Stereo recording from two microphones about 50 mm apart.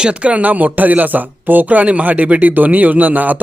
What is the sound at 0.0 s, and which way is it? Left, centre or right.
Speech, right.